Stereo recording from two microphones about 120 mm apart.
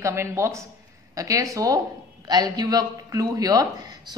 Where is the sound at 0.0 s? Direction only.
25° right (ahead or behind).